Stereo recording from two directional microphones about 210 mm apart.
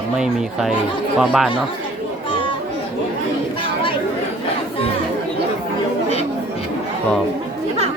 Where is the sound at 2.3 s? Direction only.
25° left (ahead or behind).